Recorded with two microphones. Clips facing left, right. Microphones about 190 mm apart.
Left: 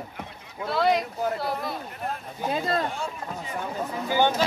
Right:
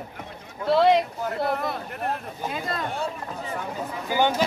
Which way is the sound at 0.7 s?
25° right (ahead or behind).